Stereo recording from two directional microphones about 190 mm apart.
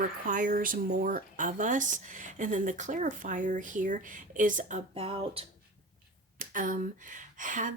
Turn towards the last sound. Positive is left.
turn(degrees=-40)  # may be behind; listen again after turning